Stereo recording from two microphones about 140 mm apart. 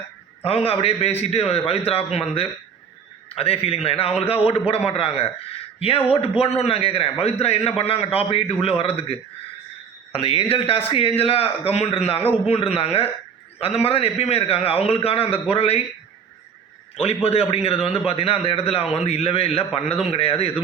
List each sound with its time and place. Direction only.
0.4 s a man's voice: 45° left (ahead or behind)
17.2 s a man's voice: 45° left (ahead or behind)